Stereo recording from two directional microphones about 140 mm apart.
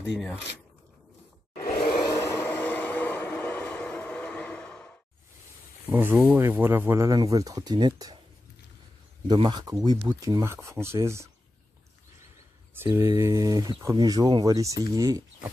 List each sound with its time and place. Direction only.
0.0 s speech: centre (ahead or behind)
2.0 s vehicle: 20° left (ahead or behind)
5.9 s speech: 15° right (ahead or behind); by 8.2 s 35° right (ahead or behind)
9.3 s speech: 30° right (ahead or behind)
12.7 s speech: 20° right (ahead or behind)